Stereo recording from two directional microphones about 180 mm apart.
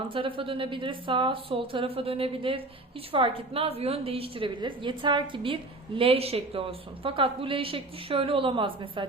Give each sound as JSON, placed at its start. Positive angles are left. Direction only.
{"t": 0.1, "sound": "a woman's voice", "side_deg": -30}